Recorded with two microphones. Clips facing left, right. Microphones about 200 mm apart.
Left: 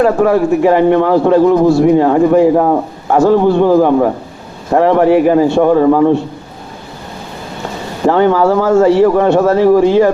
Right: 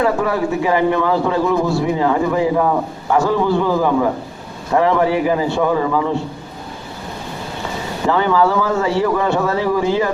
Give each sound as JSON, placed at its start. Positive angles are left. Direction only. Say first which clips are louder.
{"t": 0.0, "sound": "a man's voice", "louder": "left 7 dB", "side_deg": 55}
{"t": 8.0, "sound": "a man's voice", "louder": "left 6 dB", "side_deg": 50}